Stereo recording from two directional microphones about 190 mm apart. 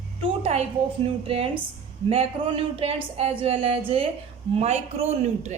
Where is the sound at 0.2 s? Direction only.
35° right (ahead or behind).